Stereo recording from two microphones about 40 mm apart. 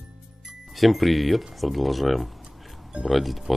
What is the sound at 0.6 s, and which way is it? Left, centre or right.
Speech, centre.